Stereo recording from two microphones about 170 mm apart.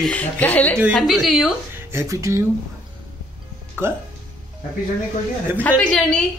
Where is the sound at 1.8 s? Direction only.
15° right (ahead or behind).